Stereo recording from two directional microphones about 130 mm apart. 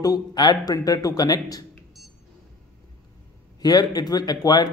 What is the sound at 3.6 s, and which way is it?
Speech, 30° left (ahead or behind).